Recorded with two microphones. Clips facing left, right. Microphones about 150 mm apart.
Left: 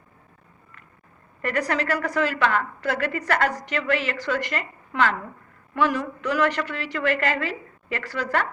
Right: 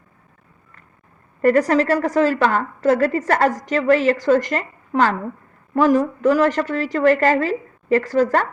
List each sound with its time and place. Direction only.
1.4 s a woman's voice: 40° right (ahead or behind)